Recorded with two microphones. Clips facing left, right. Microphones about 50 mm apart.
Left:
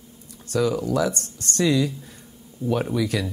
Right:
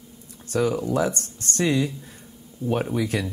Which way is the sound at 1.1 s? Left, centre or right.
Left.